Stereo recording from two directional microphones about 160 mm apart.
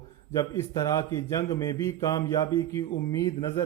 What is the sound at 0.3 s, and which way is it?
A man's voice, 20° left (ahead or behind).